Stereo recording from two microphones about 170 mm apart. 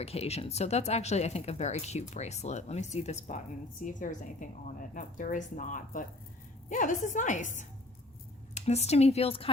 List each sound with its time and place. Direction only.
0.0 s a woman's voice: 35° left (ahead or behind)